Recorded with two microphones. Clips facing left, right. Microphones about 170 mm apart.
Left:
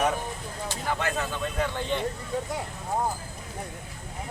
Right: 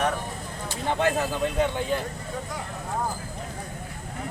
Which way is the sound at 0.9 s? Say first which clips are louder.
Right 5 dB; 30° right (ahead or behind).